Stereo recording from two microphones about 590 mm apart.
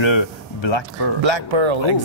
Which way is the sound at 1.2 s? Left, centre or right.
Right.